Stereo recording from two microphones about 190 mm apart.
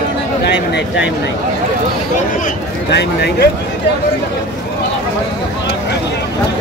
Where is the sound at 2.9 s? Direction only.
60° left (ahead or behind).